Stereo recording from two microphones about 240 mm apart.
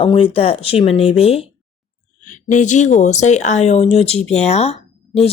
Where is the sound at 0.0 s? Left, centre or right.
Left.